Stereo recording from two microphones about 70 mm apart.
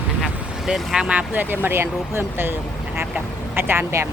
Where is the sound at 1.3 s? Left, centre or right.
Right.